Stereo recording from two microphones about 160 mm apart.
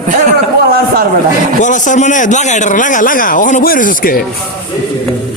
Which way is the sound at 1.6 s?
50° left (ahead or behind).